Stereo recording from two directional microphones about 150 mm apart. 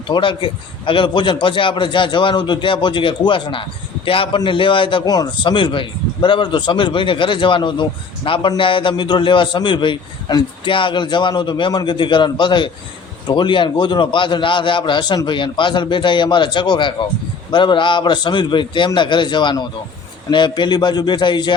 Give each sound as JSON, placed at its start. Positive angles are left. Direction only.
{"t": 0.1, "sound": "speech", "side_deg": 35}